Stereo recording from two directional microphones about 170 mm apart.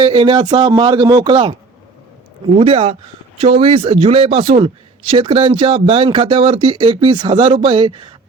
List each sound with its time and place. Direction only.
0.0 s speech: 30° right (ahead or behind)
2.6 s a man's voice: 35° right (ahead or behind)